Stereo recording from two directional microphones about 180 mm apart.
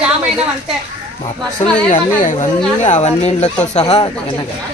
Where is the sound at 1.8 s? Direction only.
45° left (ahead or behind).